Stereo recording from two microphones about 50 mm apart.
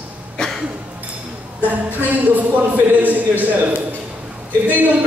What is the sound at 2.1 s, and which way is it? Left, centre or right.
A man's voice, right.